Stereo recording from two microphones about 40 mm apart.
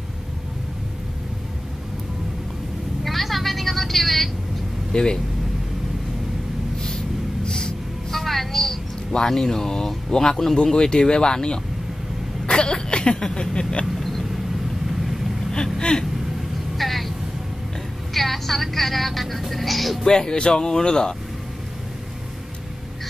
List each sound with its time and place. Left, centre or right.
3.0 s vehicle: centre
4.9 s speech: centre
7.4 s music: centre
8.1 s music: centre
9.1 s speech: centre
12.4 s a sound: left
13.9 s vehicle: centre
15.8 s vehicle: centre
16.7 s vehicle: centre
18.1 s a woman's voice: centre
20.1 s speech: centre